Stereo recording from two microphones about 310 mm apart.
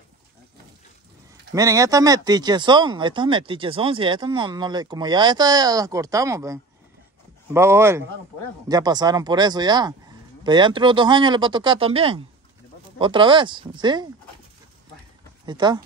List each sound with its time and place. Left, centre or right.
1.5 s speech: centre
15.4 s speech: centre